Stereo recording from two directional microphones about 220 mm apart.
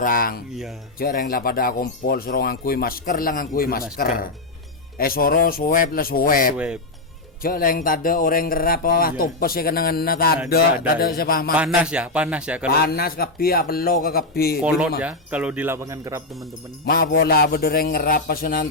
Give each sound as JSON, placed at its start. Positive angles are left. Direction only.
{"t": 0.0, "sound": "a man's voice", "side_deg": 40}
{"t": 11.5, "sound": "a man's voice", "side_deg": -5}
{"t": 12.6, "sound": "a man's voice", "side_deg": 45}
{"t": 14.6, "sound": "a man's voice", "side_deg": -5}
{"t": 16.8, "sound": "a man's voice", "side_deg": 40}